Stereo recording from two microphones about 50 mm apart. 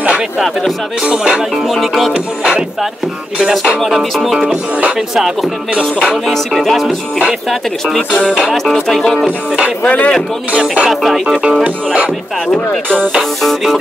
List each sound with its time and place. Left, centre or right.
1.0 s speech: centre
1.7 s speech: centre
3.8 s speech: centre
6.2 s speech: centre
8.6 s speech: centre
9.8 s speech: left
10.6 s speech: centre
10.9 s speech: centre
11.6 s speech: right
13.4 s speech: centre